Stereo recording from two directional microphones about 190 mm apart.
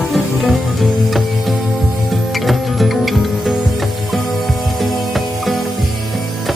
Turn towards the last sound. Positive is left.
turn(degrees=0)  # may be behind; listen again after turning